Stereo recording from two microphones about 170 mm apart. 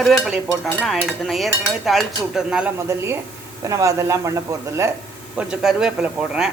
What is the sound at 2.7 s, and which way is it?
Speech, 15° right (ahead or behind).